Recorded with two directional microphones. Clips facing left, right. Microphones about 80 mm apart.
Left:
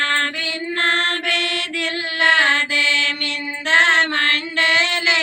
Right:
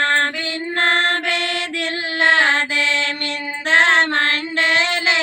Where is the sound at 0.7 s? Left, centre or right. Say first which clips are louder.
Right 3 dB; right.